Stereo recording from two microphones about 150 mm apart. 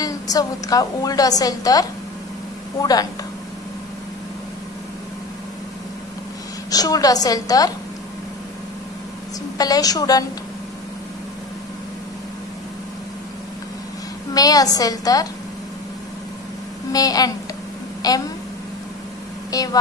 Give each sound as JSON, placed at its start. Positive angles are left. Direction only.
{"t": 0.0, "sound": "a woman's voice", "side_deg": 25}
{"t": 6.7, "sound": "a woman's voice", "side_deg": 25}
{"t": 9.6, "sound": "a woman's voice", "side_deg": 25}
{"t": 14.3, "sound": "a woman's voice", "side_deg": 25}
{"t": 16.9, "sound": "a woman's voice", "side_deg": 25}
{"t": 19.5, "sound": "a woman's voice", "side_deg": 25}